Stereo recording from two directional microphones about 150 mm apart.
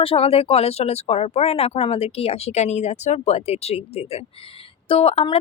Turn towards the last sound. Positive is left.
turn(degrees=40)  # may be behind; listen again after turning